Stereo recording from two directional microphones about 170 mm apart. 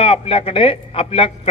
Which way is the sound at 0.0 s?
30° left (ahead or behind).